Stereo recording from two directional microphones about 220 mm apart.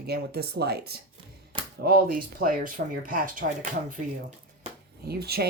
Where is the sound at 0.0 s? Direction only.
45° right (ahead or behind).